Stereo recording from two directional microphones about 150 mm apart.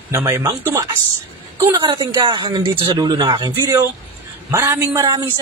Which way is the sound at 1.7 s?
30° right (ahead or behind).